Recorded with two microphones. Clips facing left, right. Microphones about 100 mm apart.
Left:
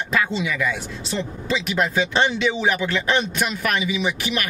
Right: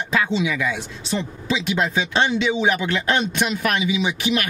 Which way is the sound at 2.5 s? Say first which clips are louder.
Right 2 dB; 20° right (ahead or behind).